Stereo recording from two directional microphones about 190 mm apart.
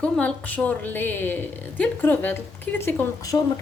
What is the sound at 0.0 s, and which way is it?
A woman's voice, 5° left (ahead or behind).